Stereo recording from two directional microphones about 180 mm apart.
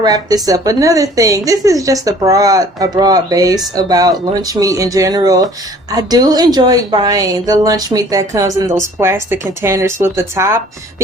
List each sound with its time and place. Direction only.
0.0 s a woman's voice: 20° right (ahead or behind)